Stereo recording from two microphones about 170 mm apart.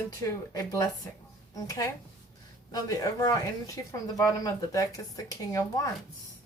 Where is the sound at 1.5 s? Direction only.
20° left (ahead or behind).